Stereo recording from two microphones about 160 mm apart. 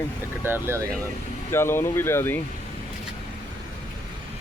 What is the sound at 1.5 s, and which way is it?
Speech, 15° left (ahead or behind).